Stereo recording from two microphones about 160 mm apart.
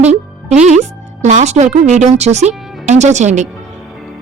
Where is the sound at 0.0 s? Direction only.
45° right (ahead or behind).